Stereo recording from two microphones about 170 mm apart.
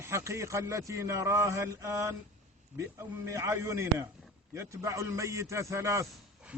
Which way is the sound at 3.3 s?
15° right (ahead or behind).